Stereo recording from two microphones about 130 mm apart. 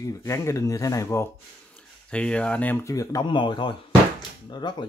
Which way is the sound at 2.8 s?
25° left (ahead or behind).